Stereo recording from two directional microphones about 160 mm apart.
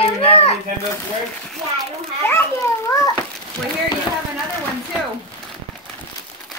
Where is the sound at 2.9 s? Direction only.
20° left (ahead or behind).